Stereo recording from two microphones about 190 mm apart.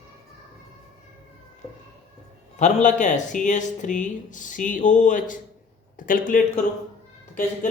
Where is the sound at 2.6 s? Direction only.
40° left (ahead or behind).